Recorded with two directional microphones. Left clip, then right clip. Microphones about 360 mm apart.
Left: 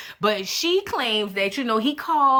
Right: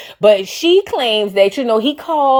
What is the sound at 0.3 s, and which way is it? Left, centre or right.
Speech, centre.